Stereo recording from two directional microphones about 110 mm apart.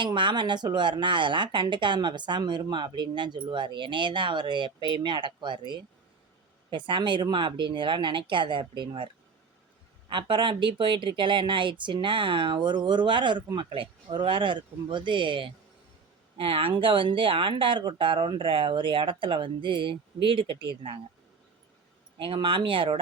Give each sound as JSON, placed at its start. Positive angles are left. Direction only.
{"t": 0.0, "sound": "speech", "side_deg": -45}
{"t": 10.1, "sound": "speech", "side_deg": -50}
{"t": 22.2, "sound": "speech", "side_deg": -50}